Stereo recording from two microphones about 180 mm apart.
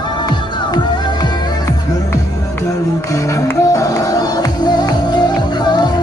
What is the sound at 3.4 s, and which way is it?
Music, 15° left (ahead or behind).